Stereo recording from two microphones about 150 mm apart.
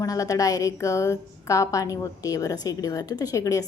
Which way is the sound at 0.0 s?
25° left (ahead or behind).